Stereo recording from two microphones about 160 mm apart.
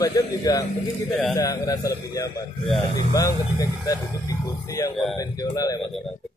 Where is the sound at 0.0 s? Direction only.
20° left (ahead or behind).